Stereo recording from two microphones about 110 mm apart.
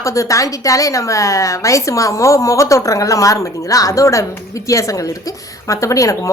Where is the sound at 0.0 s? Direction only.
30° left (ahead or behind).